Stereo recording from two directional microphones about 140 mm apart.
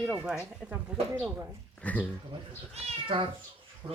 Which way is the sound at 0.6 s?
5° left (ahead or behind).